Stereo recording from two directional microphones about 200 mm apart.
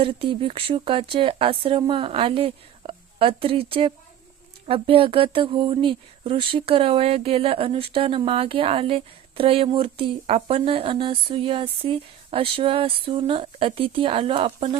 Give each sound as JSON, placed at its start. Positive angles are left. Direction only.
{"t": 0.0, "sound": "speech", "side_deg": -25}